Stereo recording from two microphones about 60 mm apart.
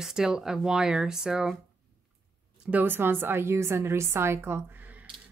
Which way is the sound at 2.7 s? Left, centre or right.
Right.